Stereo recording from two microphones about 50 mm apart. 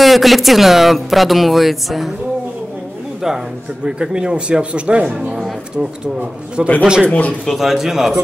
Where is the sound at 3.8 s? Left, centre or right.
Centre.